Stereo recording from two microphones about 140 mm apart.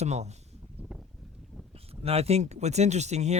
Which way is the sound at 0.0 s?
50° right (ahead or behind).